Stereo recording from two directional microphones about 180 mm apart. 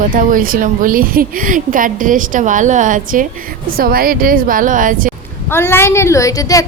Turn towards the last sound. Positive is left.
turn(degrees=20)  # may be behind; listen again after turning